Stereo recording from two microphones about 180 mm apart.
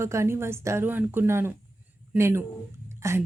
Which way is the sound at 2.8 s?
15° right (ahead or behind).